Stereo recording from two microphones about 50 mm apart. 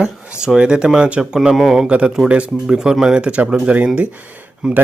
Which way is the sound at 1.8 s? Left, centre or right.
Centre.